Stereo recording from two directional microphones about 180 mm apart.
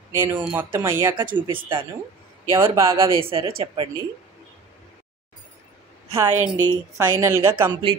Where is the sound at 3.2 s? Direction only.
30° right (ahead or behind).